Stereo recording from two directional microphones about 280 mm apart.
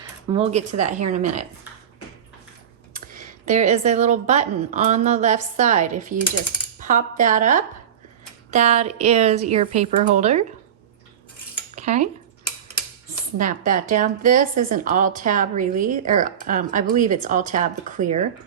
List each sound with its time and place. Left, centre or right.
0.0 s a woman's voice: right
2.9 s a woman's voice: right
11.7 s cutlery: right
13.4 s a woman's voice: right